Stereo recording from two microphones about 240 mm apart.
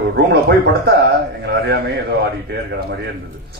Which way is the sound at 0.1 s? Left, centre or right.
Right.